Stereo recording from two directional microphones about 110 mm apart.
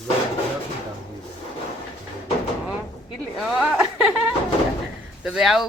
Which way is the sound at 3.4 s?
5° right (ahead or behind).